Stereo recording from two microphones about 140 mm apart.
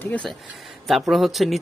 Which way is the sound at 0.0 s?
10° left (ahead or behind).